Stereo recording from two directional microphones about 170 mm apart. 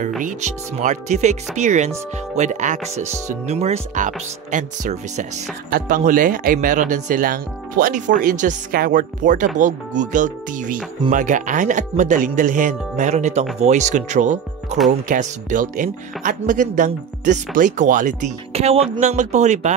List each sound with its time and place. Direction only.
0.2 s speech: 45° right (ahead or behind)